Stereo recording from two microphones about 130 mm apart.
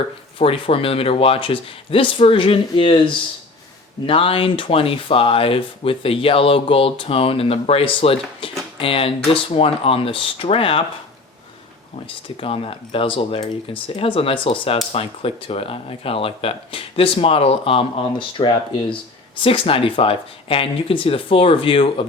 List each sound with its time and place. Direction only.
0.3 s speech: 45° left (ahead or behind)
12.4 s speech: 45° left (ahead or behind)